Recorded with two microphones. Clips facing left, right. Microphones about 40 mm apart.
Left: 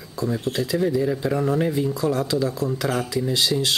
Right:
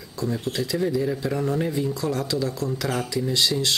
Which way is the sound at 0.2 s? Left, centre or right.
Centre.